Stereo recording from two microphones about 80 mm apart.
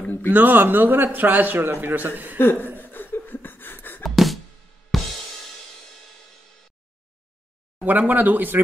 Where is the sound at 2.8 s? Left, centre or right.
Left.